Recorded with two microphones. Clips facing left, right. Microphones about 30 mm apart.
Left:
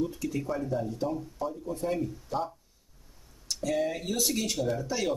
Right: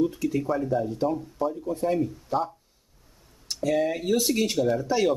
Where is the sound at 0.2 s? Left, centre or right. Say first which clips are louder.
Right 6 dB; centre.